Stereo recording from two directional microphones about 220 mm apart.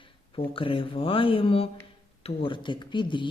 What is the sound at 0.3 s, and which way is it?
Speech, 25° left (ahead or behind).